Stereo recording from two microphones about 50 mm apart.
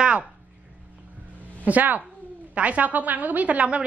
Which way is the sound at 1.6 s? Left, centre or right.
Right.